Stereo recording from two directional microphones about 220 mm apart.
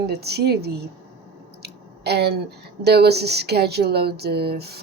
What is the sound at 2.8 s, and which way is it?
Speech, 45° right (ahead or behind).